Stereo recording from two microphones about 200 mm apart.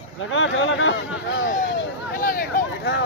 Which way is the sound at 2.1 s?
45° left (ahead or behind).